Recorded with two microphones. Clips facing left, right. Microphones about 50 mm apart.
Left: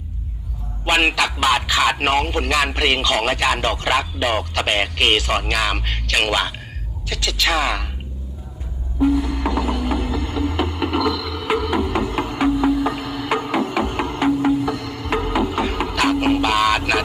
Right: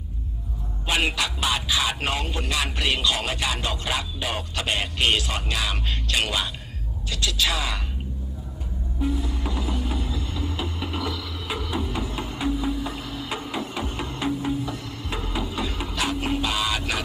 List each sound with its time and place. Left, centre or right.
0.9 s speech: left
9.1 s music: left